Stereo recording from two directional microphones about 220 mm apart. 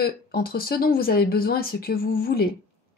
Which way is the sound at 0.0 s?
45° left (ahead or behind).